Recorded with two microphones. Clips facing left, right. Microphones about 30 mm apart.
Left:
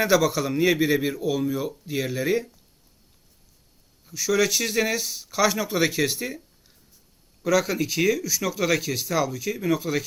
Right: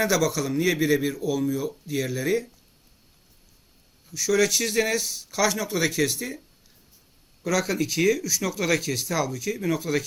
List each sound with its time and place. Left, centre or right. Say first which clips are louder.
0.0 s speech: left 2 dB; centre
4.0 s speech: even; centre
7.4 s speech: left 2 dB; centre